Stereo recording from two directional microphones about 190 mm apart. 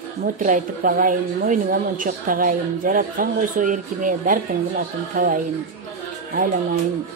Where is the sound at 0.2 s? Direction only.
45° right (ahead or behind).